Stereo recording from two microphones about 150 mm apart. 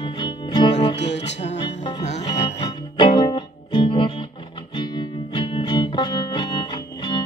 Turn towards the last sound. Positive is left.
turn(degrees=30)  # may be behind; listen again after turning